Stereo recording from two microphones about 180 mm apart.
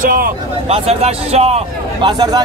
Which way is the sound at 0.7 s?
35° right (ahead or behind).